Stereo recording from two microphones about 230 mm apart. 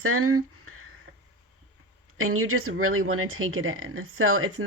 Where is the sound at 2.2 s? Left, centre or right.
Right.